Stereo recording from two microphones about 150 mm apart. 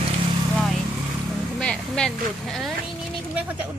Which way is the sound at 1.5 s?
5° left (ahead or behind).